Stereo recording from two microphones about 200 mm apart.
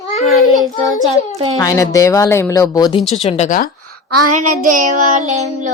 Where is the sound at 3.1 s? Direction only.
35° left (ahead or behind).